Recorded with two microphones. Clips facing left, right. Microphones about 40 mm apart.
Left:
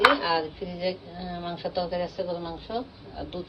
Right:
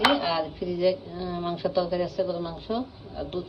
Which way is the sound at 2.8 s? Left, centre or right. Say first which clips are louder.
Right 3 dB; centre.